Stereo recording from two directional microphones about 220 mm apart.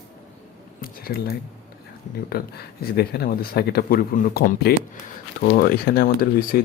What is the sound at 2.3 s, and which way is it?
Speech, 45° left (ahead or behind).